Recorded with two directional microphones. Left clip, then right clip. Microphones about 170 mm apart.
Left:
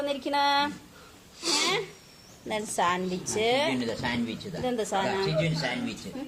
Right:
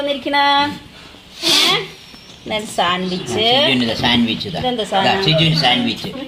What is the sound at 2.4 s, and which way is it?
A woman's voice, centre (ahead or behind).